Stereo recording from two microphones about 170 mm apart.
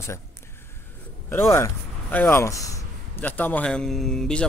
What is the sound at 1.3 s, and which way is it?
A man's voice, 15° left (ahead or behind).